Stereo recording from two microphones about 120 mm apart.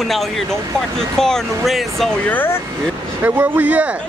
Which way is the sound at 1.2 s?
Centre (ahead or behind).